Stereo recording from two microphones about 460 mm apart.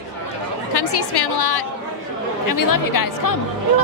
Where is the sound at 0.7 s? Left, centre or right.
Left.